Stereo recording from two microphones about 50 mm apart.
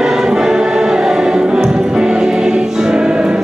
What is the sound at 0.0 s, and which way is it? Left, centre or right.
Music, centre.